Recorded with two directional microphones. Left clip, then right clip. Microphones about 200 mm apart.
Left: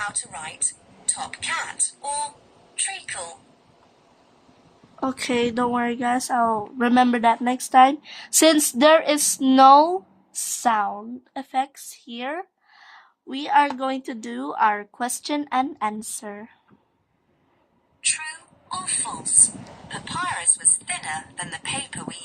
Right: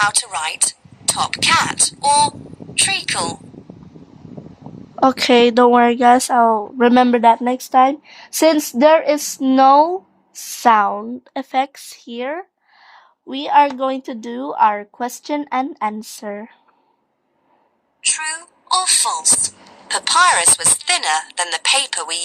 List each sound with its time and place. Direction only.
0.0 s speech: 45° right (ahead or behind)
4.9 s a woman's voice: 45° right (ahead or behind); by 7.6 s 30° right (ahead or behind)
7.6 s a woman's voice: 20° right (ahead or behind)
10.7 s speech: 35° right (ahead or behind)
18.2 s speech: 55° right (ahead or behind)